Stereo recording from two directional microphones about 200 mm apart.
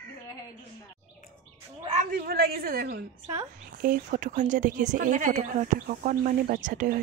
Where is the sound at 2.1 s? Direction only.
50° right (ahead or behind).